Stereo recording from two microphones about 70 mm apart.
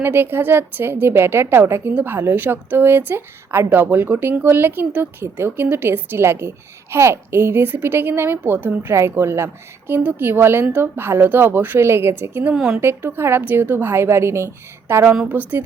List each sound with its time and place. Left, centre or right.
0.0 s a woman's voice: right
12.5 s speech: centre
12.8 s a woman's voice: right
15.3 s speech: right